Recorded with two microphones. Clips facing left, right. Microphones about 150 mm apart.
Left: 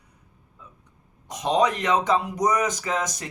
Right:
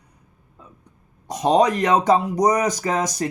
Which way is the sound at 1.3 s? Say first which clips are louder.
Right 5 dB; 35° right (ahead or behind).